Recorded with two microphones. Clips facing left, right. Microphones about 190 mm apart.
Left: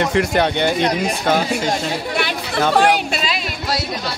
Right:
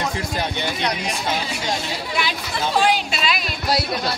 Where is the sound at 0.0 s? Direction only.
70° left (ahead or behind).